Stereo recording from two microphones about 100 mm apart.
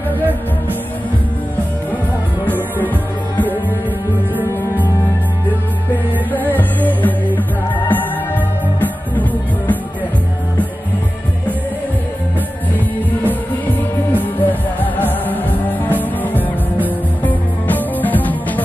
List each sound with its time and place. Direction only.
2.4 s music: 15° left (ahead or behind)
6.3 s music: 15° left (ahead or behind)
13.2 s music: 15° left (ahead or behind)